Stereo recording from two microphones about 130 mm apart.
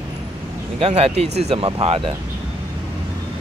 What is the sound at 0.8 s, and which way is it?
Speech, 50° right (ahead or behind).